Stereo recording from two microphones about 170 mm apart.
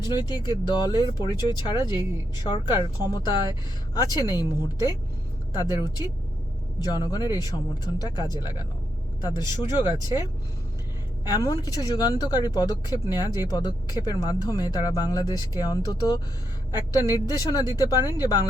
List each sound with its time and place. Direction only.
0.0 s speech: 25° left (ahead or behind)
5.5 s speech: 25° left (ahead or behind)
11.3 s speech: 20° left (ahead or behind)